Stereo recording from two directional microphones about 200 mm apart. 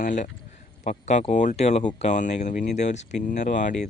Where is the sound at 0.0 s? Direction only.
40° left (ahead or behind).